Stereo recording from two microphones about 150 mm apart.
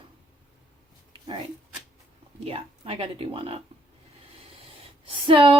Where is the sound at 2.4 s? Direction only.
40° right (ahead or behind).